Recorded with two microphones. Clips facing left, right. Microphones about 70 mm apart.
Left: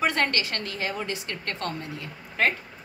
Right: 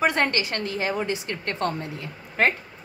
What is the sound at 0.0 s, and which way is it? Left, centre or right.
A woman's voice, right.